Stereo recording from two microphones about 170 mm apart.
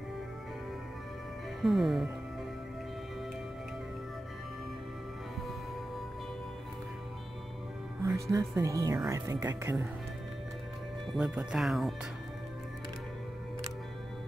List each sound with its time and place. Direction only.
1.6 s speech: centre (ahead or behind)
8.0 s speech: 20° right (ahead or behind)
11.1 s speech: 5° right (ahead or behind)